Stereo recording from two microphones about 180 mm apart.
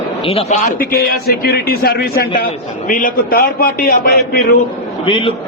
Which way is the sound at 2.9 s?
50° left (ahead or behind).